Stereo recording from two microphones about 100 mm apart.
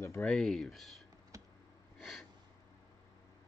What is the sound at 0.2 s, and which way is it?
Speech, 5° left (ahead or behind).